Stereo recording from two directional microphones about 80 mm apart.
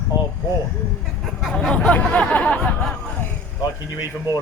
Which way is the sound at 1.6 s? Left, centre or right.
Centre.